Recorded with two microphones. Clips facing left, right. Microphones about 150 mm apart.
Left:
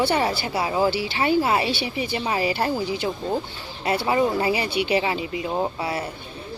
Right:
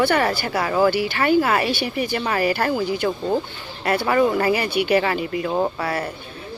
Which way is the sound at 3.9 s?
20° left (ahead or behind).